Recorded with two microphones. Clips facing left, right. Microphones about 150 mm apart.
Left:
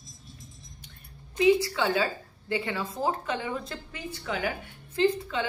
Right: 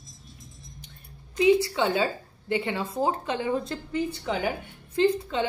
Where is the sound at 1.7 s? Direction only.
25° right (ahead or behind).